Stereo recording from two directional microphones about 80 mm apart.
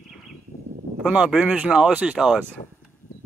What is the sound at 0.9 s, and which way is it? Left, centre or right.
Speech, centre.